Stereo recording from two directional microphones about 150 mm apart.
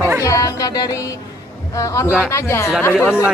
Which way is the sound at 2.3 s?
20° left (ahead or behind).